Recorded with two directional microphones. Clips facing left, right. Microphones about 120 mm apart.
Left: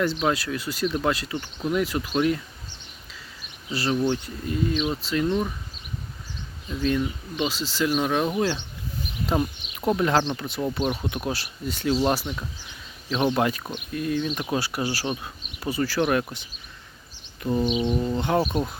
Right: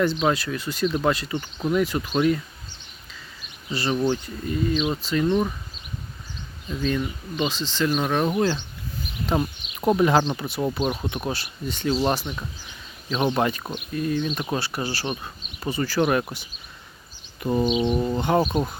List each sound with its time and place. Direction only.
0.0 s speech: centre (ahead or behind)
3.7 s speech: centre (ahead or behind)
6.8 s speech: centre (ahead or behind)
17.5 s a sound: 25° right (ahead or behind)
17.8 s speech: 10° right (ahead or behind)
18.2 s speech: centre (ahead or behind)